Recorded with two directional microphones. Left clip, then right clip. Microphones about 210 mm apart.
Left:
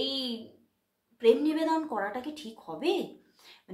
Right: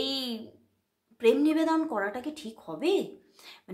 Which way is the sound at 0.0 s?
40° right (ahead or behind).